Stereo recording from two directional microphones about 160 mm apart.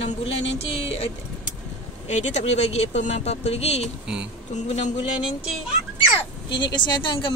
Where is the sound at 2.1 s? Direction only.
45° left (ahead or behind).